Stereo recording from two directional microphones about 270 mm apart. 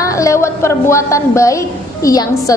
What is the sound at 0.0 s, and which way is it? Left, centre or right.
A woman's voice, centre.